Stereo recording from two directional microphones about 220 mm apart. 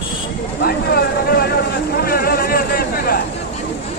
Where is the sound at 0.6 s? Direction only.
45° left (ahead or behind).